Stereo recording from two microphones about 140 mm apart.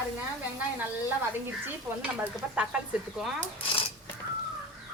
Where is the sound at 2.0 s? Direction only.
10° right (ahead or behind).